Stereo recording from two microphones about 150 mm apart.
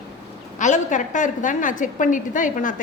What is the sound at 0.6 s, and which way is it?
A woman's voice, 55° left (ahead or behind).